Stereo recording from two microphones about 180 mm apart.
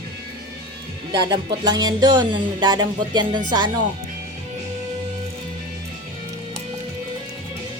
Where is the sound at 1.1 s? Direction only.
25° right (ahead or behind).